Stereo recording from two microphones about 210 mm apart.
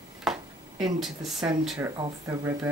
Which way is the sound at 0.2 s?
Centre (ahead or behind).